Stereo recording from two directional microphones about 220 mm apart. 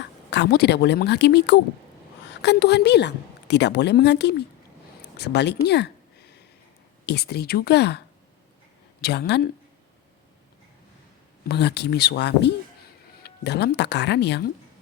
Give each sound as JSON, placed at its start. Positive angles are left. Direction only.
{"t": 0.0, "sound": "a woman's voice", "side_deg": 50}
{"t": 7.0, "sound": "a woman's voice", "side_deg": 50}
{"t": 11.4, "sound": "a woman's voice", "side_deg": 50}